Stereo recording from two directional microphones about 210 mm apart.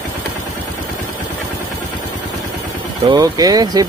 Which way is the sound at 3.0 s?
20° right (ahead or behind).